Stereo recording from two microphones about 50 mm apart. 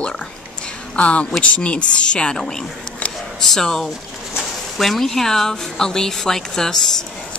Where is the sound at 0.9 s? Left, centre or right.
Left.